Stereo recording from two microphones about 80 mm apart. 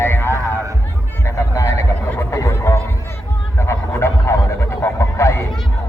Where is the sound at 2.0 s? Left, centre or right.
Left.